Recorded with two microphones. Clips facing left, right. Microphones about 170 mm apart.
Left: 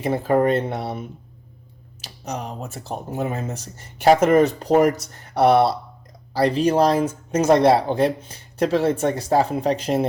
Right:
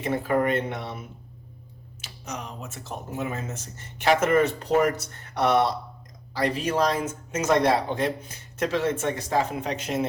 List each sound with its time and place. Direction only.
0.0 s speech: 30° left (ahead or behind)